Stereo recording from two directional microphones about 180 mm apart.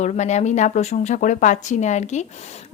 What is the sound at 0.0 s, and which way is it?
Speech, 40° left (ahead or behind).